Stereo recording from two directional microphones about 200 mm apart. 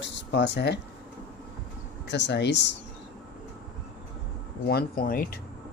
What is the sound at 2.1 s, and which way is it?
Speech, 60° left (ahead or behind).